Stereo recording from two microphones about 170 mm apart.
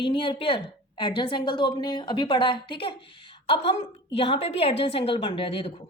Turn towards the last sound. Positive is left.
turn(degrees=35)  # may be behind; listen again after turning